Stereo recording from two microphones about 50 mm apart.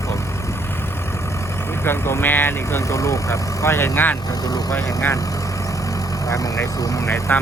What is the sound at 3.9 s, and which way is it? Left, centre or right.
Speech, left.